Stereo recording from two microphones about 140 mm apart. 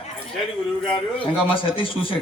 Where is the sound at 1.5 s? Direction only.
40° left (ahead or behind).